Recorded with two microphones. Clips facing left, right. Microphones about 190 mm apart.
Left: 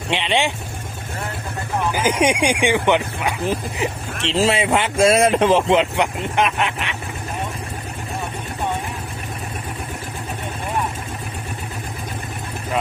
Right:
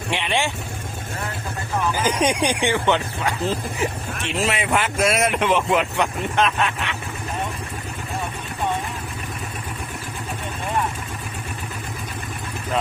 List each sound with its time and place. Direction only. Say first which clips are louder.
0.1 s speech: left 3 dB; 20° left (ahead or behind)
1.9 s speech: left 3 dB; 15° left (ahead or behind)